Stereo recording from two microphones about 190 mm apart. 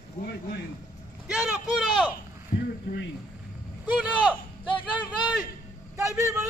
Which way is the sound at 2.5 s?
40° left (ahead or behind).